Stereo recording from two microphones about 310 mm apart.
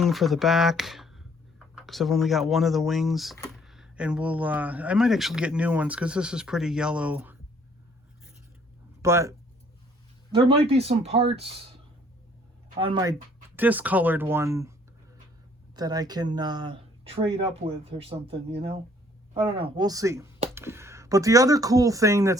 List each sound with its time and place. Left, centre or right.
0.0 s speech: centre
9.0 s speech: centre
10.3 s speech: centre
12.8 s speech: centre
15.7 s speech: centre